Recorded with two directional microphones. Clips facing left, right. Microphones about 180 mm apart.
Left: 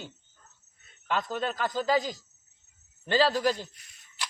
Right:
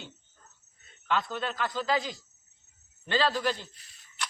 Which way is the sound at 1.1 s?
45° left (ahead or behind).